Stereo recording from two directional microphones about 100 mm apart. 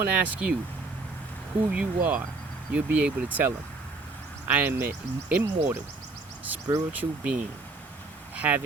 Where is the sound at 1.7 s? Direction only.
15° right (ahead or behind).